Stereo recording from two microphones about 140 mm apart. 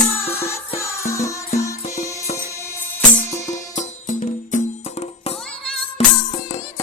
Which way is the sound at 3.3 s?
55° left (ahead or behind).